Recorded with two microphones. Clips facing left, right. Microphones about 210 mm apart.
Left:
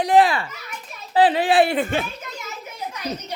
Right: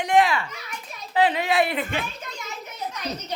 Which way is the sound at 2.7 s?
10° left (ahead or behind).